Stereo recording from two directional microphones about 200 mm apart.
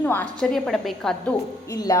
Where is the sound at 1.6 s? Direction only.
15° left (ahead or behind).